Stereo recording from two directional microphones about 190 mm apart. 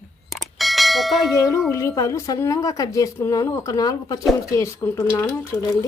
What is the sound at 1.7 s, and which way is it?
A woman's voice, 15° left (ahead or behind).